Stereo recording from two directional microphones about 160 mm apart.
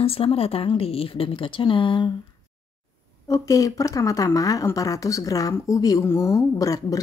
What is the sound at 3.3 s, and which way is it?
Speech, 20° left (ahead or behind).